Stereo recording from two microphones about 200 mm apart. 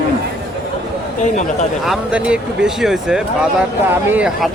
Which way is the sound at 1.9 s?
5° right (ahead or behind).